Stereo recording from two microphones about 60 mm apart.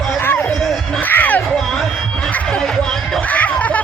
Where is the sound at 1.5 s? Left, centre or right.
Centre.